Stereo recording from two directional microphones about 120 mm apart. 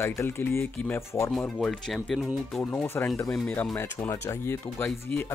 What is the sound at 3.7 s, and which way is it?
Speech, 25° left (ahead or behind).